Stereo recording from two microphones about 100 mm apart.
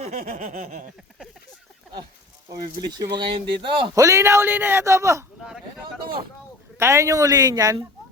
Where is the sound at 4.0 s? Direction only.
30° right (ahead or behind).